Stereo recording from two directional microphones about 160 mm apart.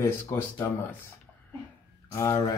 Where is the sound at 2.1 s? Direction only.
20° left (ahead or behind).